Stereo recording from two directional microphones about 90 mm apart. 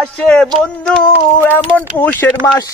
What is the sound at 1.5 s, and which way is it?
Speech, 20° left (ahead or behind).